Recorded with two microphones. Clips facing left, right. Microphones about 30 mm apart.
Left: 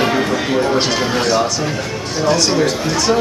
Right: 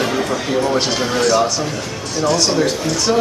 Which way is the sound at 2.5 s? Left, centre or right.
Centre.